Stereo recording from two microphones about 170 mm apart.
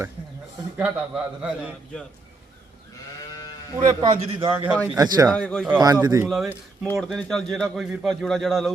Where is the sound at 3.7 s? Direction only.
25° right (ahead or behind).